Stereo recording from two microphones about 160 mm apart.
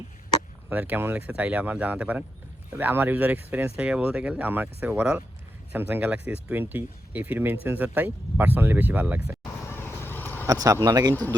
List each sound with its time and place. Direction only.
0.7 s speech: 10° right (ahead or behind)
9.4 s vehicle: 15° left (ahead or behind)
10.4 s speech: 20° right (ahead or behind)